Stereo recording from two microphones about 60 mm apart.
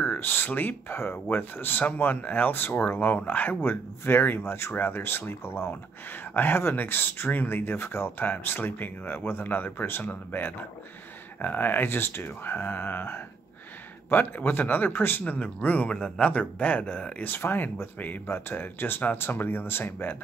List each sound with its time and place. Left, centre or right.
0.0 s a sound: left
0.5 s speech: left
15.3 s a man's voice: left
17.2 s speech: left